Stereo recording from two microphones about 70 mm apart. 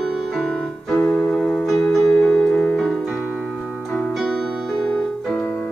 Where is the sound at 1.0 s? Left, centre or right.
Left.